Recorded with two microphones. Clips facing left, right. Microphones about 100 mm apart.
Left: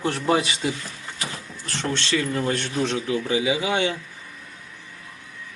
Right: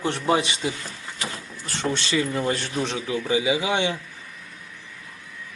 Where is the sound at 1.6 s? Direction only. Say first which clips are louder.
Right 1 dB; 10° right (ahead or behind).